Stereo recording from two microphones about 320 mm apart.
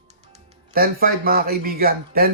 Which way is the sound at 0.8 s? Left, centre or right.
Right.